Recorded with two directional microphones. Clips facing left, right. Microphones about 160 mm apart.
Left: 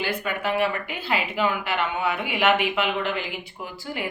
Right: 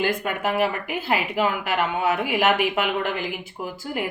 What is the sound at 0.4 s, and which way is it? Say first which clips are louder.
Speech: right 1 dB; centre (ahead or behind).